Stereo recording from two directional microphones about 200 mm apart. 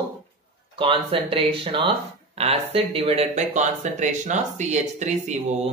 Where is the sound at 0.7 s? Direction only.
25° right (ahead or behind).